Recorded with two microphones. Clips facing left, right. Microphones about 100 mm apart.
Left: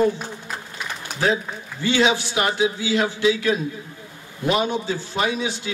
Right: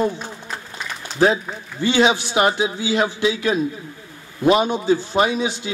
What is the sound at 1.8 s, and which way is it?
A man's voice, 20° right (ahead or behind).